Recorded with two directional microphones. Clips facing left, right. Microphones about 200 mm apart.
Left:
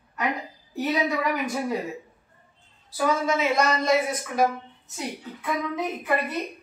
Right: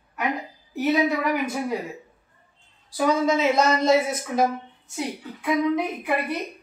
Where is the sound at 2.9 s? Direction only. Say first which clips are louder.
Right 3 dB; 20° right (ahead or behind).